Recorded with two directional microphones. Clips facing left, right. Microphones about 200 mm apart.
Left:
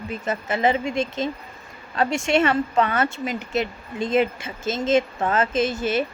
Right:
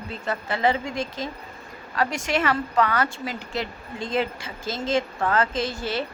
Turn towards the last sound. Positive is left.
turn(degrees=20)  # may be behind; listen again after turning